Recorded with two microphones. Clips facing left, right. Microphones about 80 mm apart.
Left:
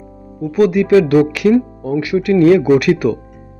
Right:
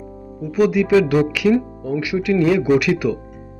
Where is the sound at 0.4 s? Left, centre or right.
Left.